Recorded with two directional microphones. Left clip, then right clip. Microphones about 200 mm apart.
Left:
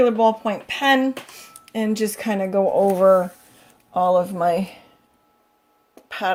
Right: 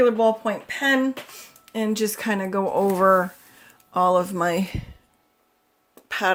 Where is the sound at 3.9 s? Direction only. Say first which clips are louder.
Left 1 dB; 65° right (ahead or behind).